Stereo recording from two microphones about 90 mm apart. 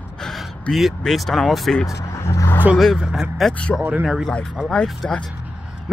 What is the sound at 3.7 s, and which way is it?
Speech, 10° left (ahead or behind).